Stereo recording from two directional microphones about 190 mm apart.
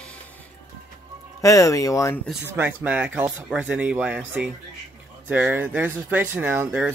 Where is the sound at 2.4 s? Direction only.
10° right (ahead or behind).